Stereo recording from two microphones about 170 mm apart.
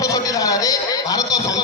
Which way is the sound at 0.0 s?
20° left (ahead or behind).